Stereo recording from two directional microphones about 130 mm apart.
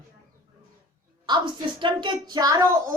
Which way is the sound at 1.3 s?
35° right (ahead or behind).